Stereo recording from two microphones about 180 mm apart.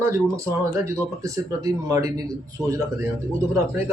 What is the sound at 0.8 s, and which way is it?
Speech, 15° right (ahead or behind).